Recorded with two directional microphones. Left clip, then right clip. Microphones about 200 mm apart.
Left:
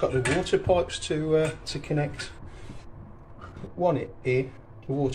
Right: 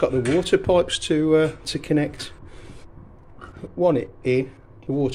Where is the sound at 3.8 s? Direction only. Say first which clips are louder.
Right 5 dB; 60° right (ahead or behind).